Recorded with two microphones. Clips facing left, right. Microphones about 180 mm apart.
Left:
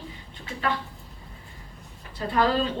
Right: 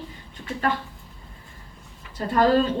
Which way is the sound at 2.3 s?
45° right (ahead or behind).